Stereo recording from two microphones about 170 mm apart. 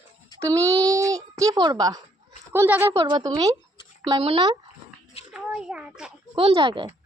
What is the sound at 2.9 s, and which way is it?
Speech, 25° right (ahead or behind).